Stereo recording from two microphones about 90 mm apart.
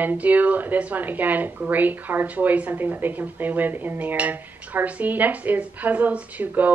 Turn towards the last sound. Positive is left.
turn(degrees=-20)  # may be behind; listen again after turning